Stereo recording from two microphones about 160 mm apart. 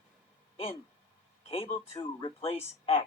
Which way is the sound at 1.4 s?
40° left (ahead or behind).